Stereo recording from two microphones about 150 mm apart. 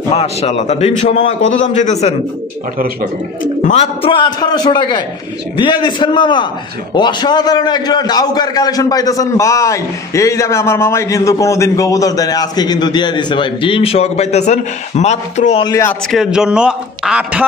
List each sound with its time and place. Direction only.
0.1 s a man's voice: 45° left (ahead or behind)
3.6 s a man's voice: 45° left (ahead or behind)
15.6 s a man's voice: 20° left (ahead or behind)
16.1 s a man's voice: 5° right (ahead or behind)